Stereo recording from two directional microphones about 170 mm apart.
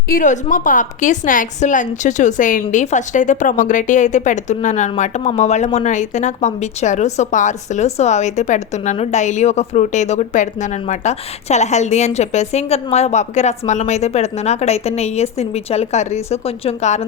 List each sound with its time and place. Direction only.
0.1 s a woman's voice: 50° left (ahead or behind)